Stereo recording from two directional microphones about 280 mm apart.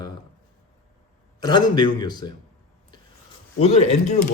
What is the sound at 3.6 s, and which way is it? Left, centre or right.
Speech, left.